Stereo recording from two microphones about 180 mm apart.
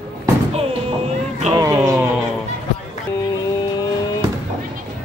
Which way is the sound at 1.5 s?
20° right (ahead or behind).